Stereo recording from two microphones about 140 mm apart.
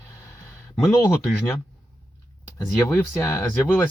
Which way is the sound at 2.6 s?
15° left (ahead or behind).